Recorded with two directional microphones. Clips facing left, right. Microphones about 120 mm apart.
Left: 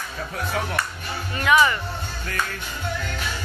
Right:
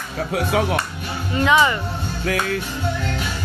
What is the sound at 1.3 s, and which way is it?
Speech, 20° right (ahead or behind).